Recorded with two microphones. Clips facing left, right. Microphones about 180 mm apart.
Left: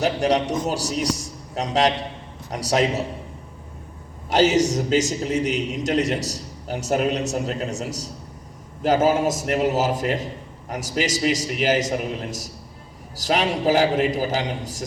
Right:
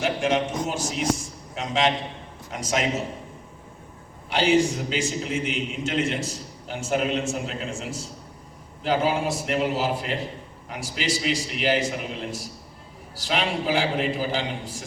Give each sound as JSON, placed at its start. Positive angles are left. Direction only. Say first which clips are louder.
{"t": 0.0, "sound": "a man's voice", "louder": "left 3 dB", "side_deg": 40}
{"t": 4.3, "sound": "a man's voice", "louder": "left 3 dB", "side_deg": 45}